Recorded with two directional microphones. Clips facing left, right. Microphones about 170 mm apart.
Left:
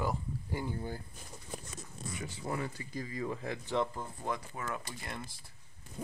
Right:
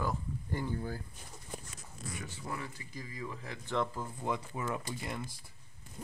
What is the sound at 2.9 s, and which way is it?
Speech, 30° left (ahead or behind).